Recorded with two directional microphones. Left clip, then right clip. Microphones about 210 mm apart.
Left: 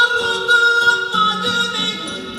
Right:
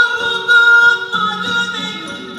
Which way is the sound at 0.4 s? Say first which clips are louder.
Right 6 dB; 30° left (ahead or behind).